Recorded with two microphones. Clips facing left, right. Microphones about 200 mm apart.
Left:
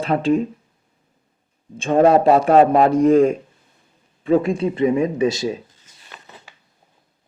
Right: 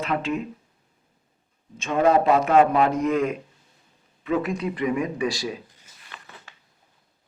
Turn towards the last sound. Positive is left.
turn(degrees=20)  # may be behind; listen again after turning